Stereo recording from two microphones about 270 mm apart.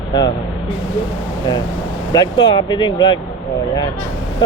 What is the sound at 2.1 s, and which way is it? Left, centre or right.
Speech, centre.